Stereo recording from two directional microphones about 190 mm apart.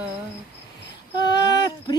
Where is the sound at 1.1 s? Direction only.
20° left (ahead or behind).